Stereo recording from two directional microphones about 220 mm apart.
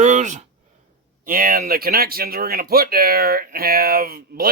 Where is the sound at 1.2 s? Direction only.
40° right (ahead or behind).